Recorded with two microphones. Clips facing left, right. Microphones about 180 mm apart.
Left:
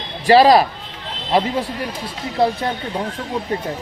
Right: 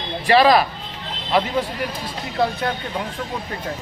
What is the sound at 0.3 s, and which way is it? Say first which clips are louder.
Speech: left 4 dB; 35° left (ahead or behind).